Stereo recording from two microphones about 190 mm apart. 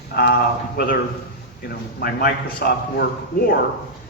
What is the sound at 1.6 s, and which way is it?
A man's voice, 55° left (ahead or behind).